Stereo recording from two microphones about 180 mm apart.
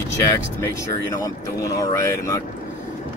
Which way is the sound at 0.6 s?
20° left (ahead or behind).